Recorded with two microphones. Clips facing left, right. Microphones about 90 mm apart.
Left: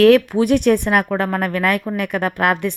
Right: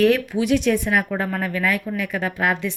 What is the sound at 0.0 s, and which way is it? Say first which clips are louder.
Speech: left 6 dB; 90° left.